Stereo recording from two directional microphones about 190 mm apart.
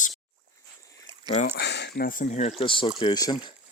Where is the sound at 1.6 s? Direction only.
65° left (ahead or behind); by 3.5 s 20° left (ahead or behind).